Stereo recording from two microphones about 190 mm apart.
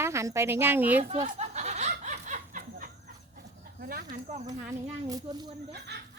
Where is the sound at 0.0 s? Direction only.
15° right (ahead or behind).